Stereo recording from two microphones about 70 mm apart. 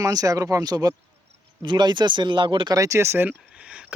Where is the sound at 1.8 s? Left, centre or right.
Right.